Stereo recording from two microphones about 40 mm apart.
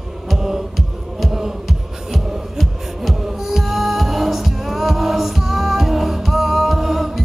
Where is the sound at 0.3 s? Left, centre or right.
Centre.